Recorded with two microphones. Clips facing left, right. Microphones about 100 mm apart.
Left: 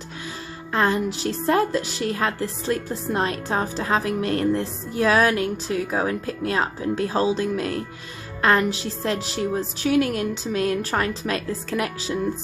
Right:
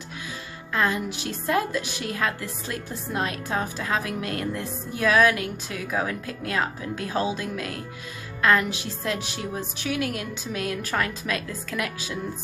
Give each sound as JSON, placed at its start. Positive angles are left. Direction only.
{"t": 0.7, "sound": "a woman's voice", "side_deg": 35}